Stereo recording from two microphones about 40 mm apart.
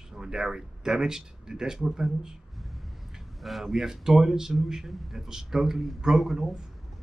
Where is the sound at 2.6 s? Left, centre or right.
Centre.